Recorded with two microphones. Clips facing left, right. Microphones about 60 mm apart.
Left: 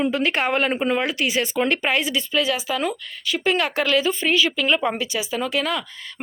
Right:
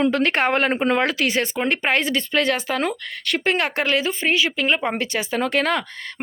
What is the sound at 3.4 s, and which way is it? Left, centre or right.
Speech, right.